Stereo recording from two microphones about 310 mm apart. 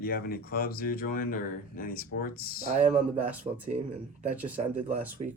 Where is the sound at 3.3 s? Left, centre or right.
Centre.